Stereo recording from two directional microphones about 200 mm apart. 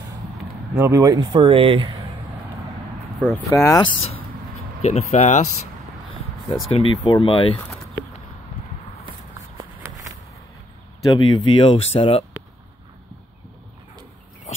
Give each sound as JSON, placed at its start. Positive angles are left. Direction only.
{"t": 0.7, "sound": "speech", "side_deg": -15}
{"t": 3.2, "sound": "speech", "side_deg": 10}
{"t": 6.7, "sound": "speech", "side_deg": 30}
{"t": 9.8, "sound": "a sound", "side_deg": -15}
{"t": 11.1, "sound": "speech", "side_deg": 25}